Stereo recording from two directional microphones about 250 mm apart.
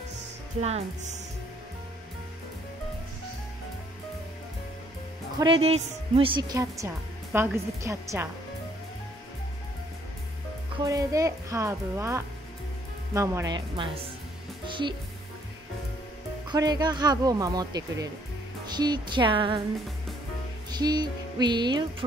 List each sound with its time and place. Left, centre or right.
0.6 s a woman's voice: right
5.4 s a woman's voice: right
10.8 s a woman's voice: centre
16.4 s a woman's voice: centre
20.7 s speech: centre